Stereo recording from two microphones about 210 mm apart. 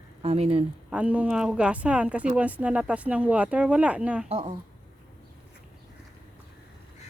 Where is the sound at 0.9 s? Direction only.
5° right (ahead or behind).